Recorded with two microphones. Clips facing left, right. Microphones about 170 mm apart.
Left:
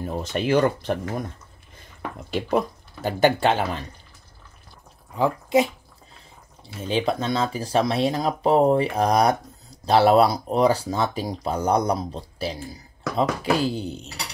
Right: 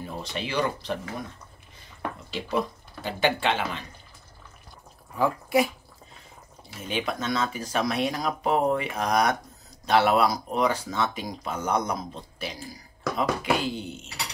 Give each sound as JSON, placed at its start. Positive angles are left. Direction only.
{"t": 0.0, "sound": "speech", "side_deg": 50}
{"t": 2.3, "sound": "speech", "side_deg": 50}
{"t": 5.1, "sound": "speech", "side_deg": 20}
{"t": 6.8, "sound": "speech", "side_deg": 30}